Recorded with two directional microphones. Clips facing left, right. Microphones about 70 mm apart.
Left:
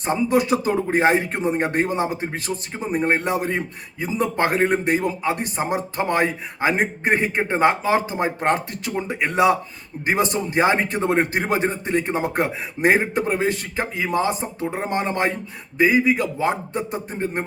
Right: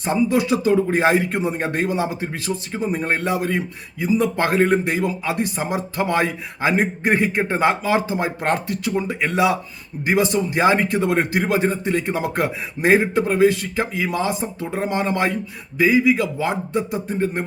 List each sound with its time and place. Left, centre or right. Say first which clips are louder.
0.0 s a man's voice: right 1 dB; left